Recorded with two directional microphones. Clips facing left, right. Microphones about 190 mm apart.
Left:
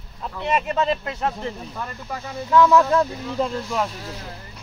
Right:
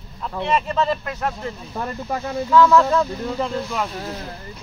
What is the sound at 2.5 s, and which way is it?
Speech, 15° left (ahead or behind).